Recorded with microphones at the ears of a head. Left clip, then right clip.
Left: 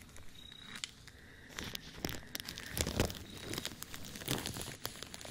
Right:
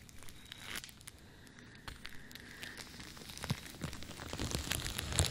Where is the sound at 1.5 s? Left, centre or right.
Left.